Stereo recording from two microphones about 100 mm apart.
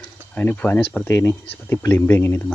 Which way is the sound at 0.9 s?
25° left (ahead or behind).